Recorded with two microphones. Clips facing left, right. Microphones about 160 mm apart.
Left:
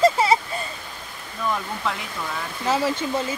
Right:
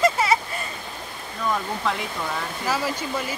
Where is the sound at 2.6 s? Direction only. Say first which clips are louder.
Left 5 dB; 25° left (ahead or behind).